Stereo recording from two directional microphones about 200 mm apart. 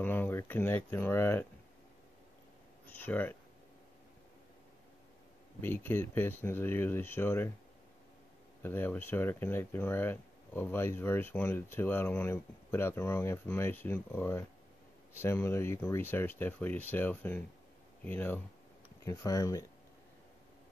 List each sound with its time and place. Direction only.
0.0 s speech: 10° left (ahead or behind)
2.9 s speech: 10° left (ahead or behind)
5.6 s speech: 10° left (ahead or behind)
8.6 s speech: 10° left (ahead or behind)